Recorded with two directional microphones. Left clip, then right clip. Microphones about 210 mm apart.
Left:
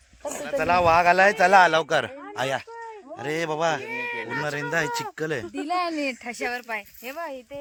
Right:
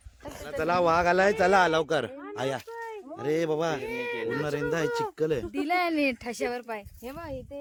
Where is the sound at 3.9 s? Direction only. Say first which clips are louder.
Left 2 dB; 55° right (ahead or behind).